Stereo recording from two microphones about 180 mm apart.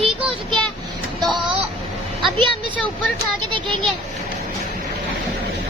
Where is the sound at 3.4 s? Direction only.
25° right (ahead or behind).